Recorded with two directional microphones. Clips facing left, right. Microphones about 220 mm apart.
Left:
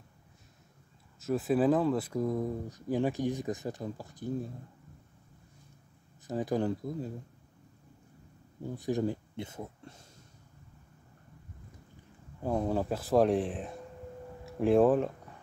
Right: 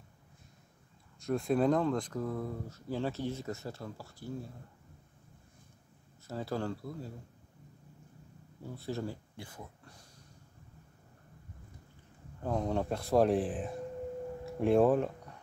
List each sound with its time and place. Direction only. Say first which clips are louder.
1.2 s speech: left 2 dB; 5° left (ahead or behind)
6.2 s speech: left 5 dB; 15° left (ahead or behind)
8.7 s speech: left 7 dB; 15° left (ahead or behind)
12.4 s speech: left 2 dB; 10° left (ahead or behind)